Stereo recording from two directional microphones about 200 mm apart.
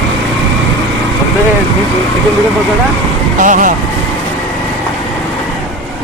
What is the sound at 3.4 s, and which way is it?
Speech, 40° right (ahead or behind).